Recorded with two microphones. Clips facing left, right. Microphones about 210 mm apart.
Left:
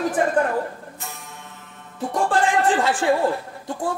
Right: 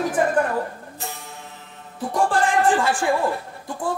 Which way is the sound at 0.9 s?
30° right (ahead or behind).